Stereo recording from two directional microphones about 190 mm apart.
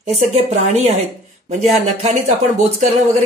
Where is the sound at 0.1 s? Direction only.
35° right (ahead or behind).